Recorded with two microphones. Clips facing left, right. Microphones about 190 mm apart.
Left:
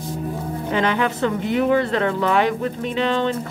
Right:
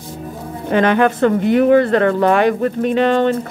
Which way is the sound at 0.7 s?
55° right (ahead or behind).